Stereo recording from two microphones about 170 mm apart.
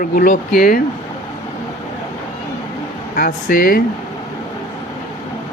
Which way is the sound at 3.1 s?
60° left (ahead or behind).